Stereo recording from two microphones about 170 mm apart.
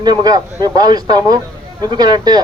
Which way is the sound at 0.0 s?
25° right (ahead or behind).